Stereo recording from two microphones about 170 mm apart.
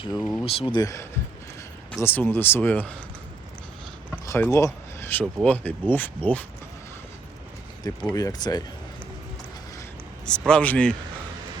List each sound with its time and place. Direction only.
0.2 s speech: 5° left (ahead or behind)
0.4 s speech: 30° left (ahead or behind); by 2.9 s 10° left (ahead or behind)
4.1 s a sound: 15° left (ahead or behind)
5.2 s speech: 5° left (ahead or behind)
8.1 s speech: 20° left (ahead or behind)
10.2 s speech: 5° left (ahead or behind)